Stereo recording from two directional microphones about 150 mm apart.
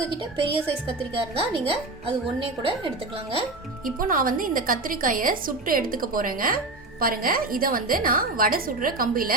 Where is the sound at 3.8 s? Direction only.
70° right (ahead or behind).